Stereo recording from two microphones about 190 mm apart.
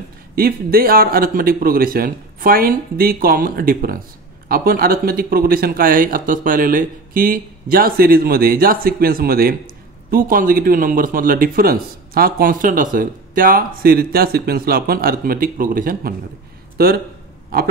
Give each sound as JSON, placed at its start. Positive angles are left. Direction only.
{"t": 0.4, "sound": "speech", "side_deg": -50}